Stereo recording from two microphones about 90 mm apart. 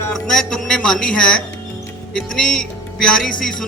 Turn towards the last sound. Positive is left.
turn(degrees=5)  # may be behind; listen again after turning